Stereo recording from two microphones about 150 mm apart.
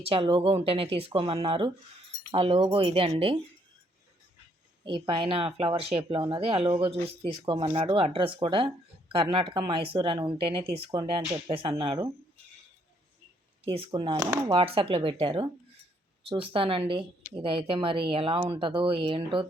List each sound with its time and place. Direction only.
0.0 s speech: 40° right (ahead or behind)
4.8 s speech: 35° right (ahead or behind)
13.7 s speech: 40° right (ahead or behind)
14.6 s speech: 40° right (ahead or behind)